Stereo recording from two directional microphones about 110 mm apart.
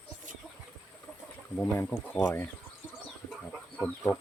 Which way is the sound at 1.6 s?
15° left (ahead or behind).